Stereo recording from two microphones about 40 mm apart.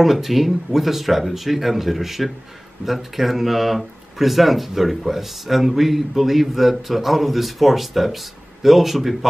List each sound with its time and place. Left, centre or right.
0.0 s speech: centre